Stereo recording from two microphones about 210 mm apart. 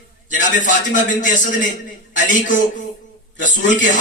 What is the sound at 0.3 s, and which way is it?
A man's voice, 40° left (ahead or behind).